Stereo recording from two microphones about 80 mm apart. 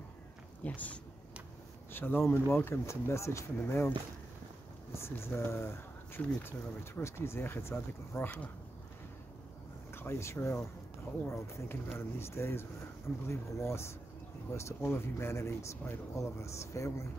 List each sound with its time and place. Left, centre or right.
0.7 s speech: centre
4.9 s speech: left
9.9 s speech: left